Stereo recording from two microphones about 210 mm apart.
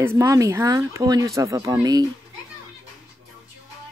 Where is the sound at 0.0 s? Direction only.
15° right (ahead or behind).